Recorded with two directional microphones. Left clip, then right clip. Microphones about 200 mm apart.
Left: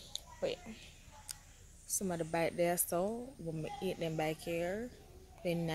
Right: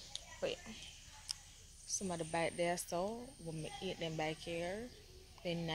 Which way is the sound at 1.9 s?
25° left (ahead or behind).